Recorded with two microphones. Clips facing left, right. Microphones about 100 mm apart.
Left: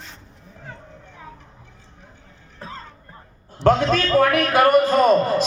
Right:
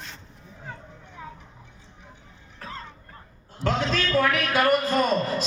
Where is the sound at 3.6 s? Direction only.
50° left (ahead or behind).